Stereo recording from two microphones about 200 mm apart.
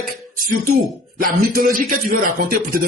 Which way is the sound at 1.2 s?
45° right (ahead or behind).